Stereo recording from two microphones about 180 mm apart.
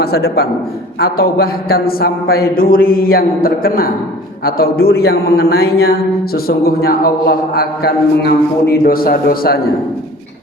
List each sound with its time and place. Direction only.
0.0 s a man's voice: 60° left (ahead or behind)